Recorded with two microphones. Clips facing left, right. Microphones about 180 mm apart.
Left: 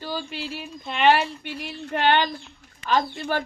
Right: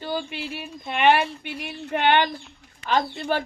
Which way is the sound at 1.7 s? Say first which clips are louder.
Even; 15° right (ahead or behind).